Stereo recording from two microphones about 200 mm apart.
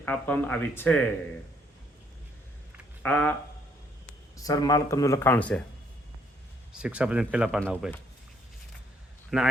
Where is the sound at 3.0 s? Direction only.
10° left (ahead or behind).